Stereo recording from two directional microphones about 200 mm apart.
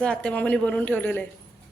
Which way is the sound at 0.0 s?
5° left (ahead or behind).